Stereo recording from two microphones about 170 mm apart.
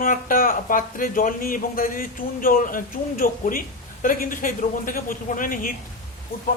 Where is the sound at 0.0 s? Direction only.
55° left (ahead or behind).